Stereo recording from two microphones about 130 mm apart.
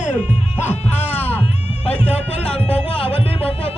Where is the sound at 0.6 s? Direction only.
55° left (ahead or behind).